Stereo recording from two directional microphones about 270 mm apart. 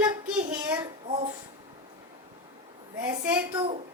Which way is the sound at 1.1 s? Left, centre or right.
Centre.